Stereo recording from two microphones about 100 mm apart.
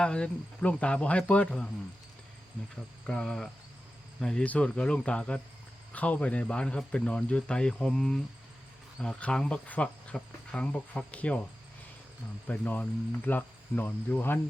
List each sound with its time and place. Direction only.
0.0 s cricket: 10° left (ahead or behind)
3.1 s speech: 5° left (ahead or behind)
4.2 s cricket: 5° left (ahead or behind)
12.5 s cricket: 15° left (ahead or behind)